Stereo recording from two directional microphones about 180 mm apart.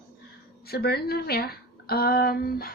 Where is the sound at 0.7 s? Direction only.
60° left (ahead or behind).